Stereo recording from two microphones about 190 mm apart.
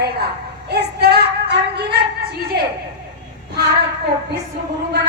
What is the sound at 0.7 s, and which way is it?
Child singing, 60° right (ahead or behind).